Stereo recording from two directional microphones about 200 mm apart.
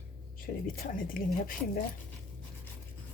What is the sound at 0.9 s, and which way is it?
Dishes, 45° left (ahead or behind).